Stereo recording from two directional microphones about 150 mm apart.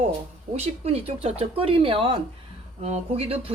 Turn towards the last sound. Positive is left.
turn(degrees=-45)  # may be behind; listen again after turning